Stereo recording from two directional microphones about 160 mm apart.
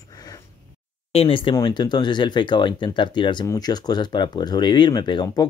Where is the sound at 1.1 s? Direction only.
35° left (ahead or behind).